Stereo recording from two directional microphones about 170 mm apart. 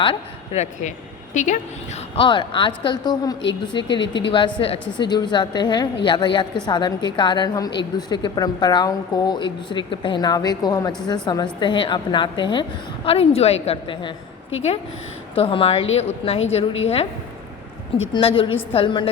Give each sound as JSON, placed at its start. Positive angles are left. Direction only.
{"t": 0.0, "sound": "a woman's voice", "side_deg": 35}
{"t": 15.4, "sound": "a woman's voice", "side_deg": 35}